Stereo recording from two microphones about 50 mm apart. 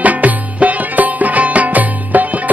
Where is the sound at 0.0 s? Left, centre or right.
Right.